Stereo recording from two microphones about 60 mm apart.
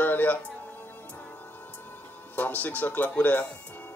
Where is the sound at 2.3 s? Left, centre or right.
Left.